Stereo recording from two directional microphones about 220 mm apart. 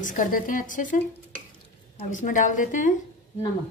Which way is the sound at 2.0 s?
35° left (ahead or behind).